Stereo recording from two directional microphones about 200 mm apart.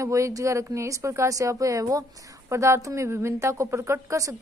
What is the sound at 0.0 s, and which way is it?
Speech, 15° right (ahead or behind).